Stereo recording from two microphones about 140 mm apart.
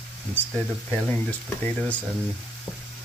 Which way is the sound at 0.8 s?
10° left (ahead or behind).